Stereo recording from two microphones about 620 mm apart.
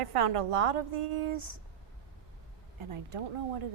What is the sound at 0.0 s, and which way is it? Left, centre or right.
A woman's voice, right.